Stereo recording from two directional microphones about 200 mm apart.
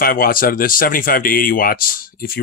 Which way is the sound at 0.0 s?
45° left (ahead or behind).